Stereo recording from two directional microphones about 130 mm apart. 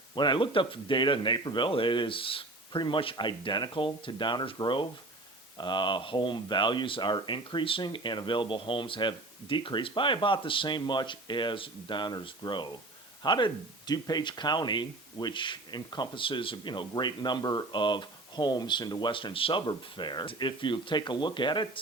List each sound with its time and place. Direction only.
0.2 s speech: 40° left (ahead or behind)